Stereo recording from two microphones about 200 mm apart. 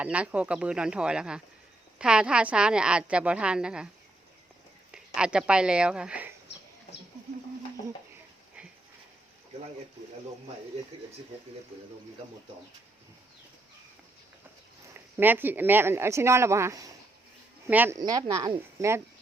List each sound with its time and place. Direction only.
0.0 s a woman's voice: 5° right (ahead or behind)
4.9 s speech: 5° right (ahead or behind)
14.9 s speech: 10° right (ahead or behind)